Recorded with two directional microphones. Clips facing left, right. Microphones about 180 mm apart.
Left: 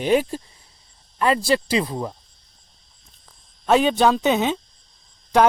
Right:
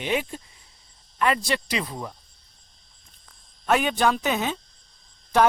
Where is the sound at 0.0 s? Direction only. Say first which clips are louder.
Left 8 dB; 40° left (ahead or behind).